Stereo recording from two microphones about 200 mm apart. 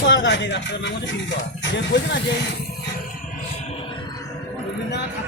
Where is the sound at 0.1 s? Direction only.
65° left (ahead or behind).